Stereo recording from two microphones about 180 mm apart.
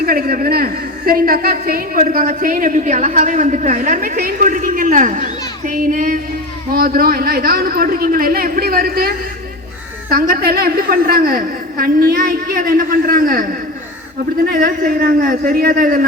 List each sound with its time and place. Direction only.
0.0 s a woman's voice: 55° right (ahead or behind)